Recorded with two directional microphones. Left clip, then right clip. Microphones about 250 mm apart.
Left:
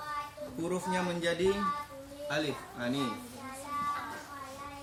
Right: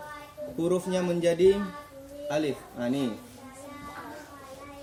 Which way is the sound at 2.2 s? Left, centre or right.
Centre.